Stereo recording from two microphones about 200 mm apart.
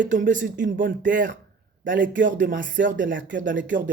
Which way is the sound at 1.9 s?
65° right (ahead or behind).